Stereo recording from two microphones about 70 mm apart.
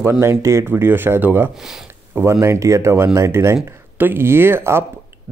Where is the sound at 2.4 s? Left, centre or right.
Right.